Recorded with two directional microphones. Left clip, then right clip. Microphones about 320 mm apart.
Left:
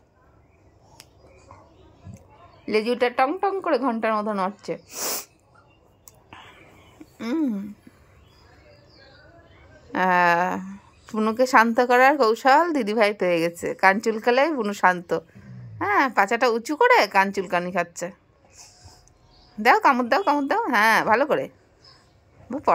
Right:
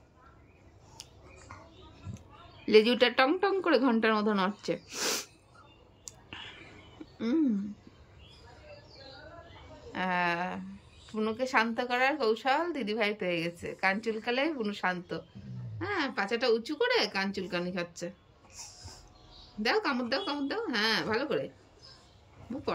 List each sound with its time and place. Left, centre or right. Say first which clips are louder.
2.1 s a woman's voice: left 3 dB; centre
6.0 s whispering: right 1 dB; centre
7.2 s a sound: left 3 dB; centre
9.9 s a woman's voice: left 12 dB; centre
19.6 s a woman's voice: left 12 dB; centre